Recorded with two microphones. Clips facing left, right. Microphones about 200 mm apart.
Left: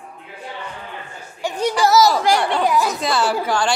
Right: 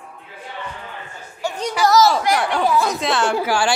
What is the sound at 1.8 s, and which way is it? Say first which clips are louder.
Speech: right 1 dB; centre (ahead or behind).